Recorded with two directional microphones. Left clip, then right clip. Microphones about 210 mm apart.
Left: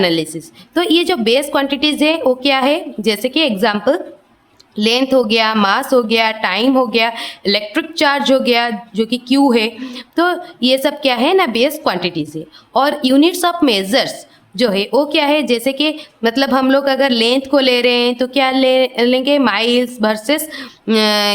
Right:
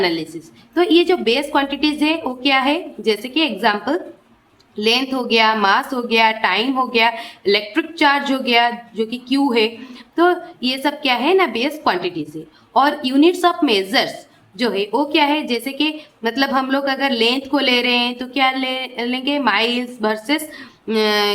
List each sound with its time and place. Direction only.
0.0 s a woman's voice: 50° left (ahead or behind)